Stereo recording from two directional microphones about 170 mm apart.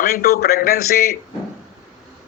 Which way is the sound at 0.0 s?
65° left (ahead or behind).